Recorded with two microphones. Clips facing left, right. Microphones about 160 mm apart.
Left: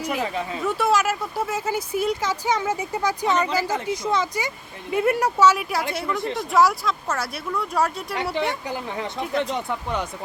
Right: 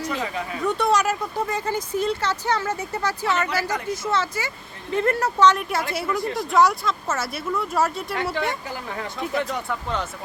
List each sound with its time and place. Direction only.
0.0 s speech: 10° left (ahead or behind)
8.1 s speech: 20° left (ahead or behind)